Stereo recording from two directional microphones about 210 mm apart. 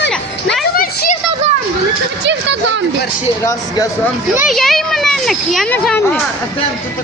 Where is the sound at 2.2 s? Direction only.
55° right (ahead or behind).